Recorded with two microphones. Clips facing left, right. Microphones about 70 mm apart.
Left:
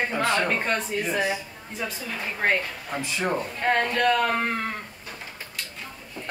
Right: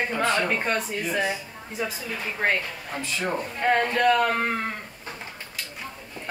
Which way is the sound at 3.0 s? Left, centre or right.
Centre.